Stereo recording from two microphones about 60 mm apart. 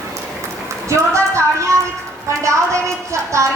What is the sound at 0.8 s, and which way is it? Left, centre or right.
Speech, right.